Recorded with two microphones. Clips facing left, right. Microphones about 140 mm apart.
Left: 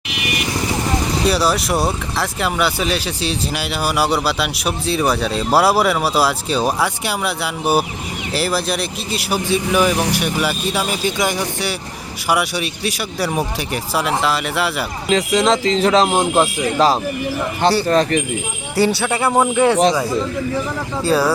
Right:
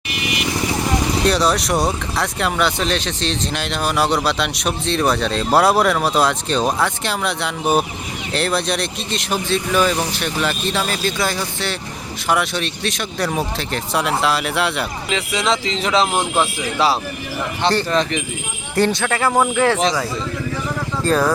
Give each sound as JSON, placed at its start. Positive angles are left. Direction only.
{"t": 1.2, "sound": "speech", "side_deg": 5}
{"t": 15.1, "sound": "speech", "side_deg": 40}
{"t": 16.1, "sound": "speech", "side_deg": 10}
{"t": 16.7, "sound": "speech", "side_deg": 40}
{"t": 18.8, "sound": "speech", "side_deg": 10}
{"t": 21.0, "sound": "speech", "side_deg": 5}